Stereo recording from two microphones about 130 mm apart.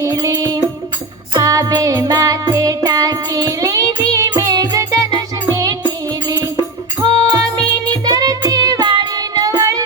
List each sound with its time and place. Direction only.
0.0 s music: 25° right (ahead or behind)
6.2 s music: 30° right (ahead or behind)